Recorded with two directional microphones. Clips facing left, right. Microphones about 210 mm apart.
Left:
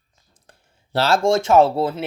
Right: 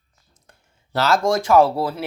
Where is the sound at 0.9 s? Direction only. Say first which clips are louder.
Left 1 dB; 30° left (ahead or behind).